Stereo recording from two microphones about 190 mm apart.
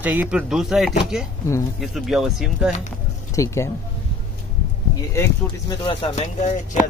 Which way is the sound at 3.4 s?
15° left (ahead or behind).